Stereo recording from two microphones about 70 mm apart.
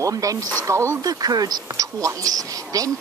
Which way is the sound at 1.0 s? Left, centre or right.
Right.